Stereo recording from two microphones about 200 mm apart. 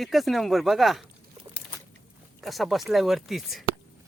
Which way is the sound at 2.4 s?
Centre (ahead or behind).